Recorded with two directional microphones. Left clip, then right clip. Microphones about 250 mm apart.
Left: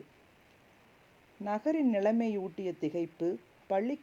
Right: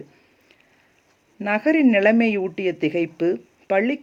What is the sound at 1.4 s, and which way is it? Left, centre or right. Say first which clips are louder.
Speech: right 12 dB; centre.